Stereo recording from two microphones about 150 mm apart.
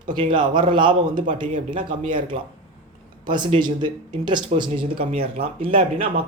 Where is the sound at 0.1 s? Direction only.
35° right (ahead or behind).